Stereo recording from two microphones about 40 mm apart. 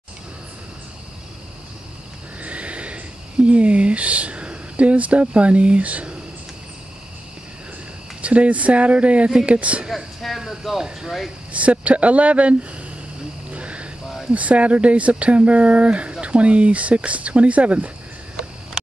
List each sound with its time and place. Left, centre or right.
2.4 s neigh: right
3.4 s speech: right
8.2 s speech: right
9.8 s speech: centre
11.5 s speech: right
13.5 s a sound: right
14.3 s speech: right